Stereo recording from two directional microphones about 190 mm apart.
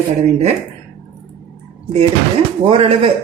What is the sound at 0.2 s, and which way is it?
Speech, 35° right (ahead or behind).